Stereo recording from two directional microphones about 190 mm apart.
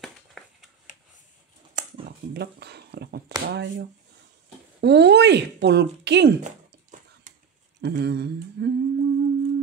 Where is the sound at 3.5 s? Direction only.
60° right (ahead or behind).